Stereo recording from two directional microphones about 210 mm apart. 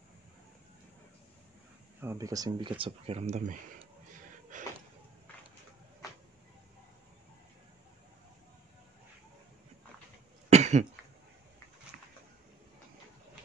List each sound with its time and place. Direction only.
2.0 s speech: 15° right (ahead or behind)
2.8 s speech: 30° right (ahead or behind)
4.5 s a sound: 35° right (ahead or behind)
10.5 s cough: 35° right (ahead or behind)